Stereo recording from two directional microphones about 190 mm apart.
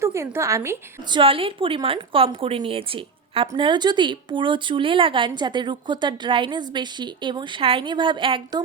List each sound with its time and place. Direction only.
0.0 s a woman's voice: 15° right (ahead or behind)
1.1 s speech: 30° right (ahead or behind)